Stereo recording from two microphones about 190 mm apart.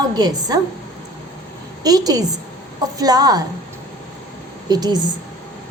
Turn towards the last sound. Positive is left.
turn(degrees=-20)  # may be behind; listen again after turning